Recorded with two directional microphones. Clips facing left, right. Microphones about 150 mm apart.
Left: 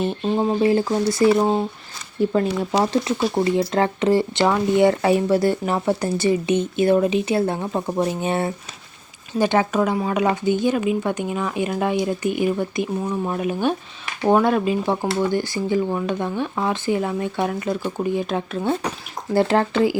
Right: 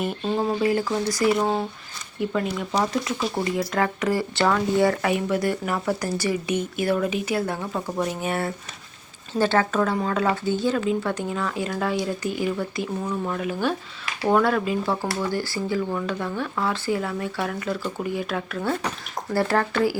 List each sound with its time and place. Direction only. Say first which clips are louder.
0.3 s speech: left 4 dB; 25° left (ahead or behind)